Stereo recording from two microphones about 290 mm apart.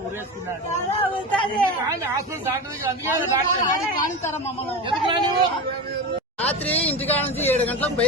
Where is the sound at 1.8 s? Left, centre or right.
Centre.